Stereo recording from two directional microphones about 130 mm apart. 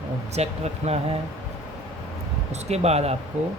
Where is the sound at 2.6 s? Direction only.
55° right (ahead or behind).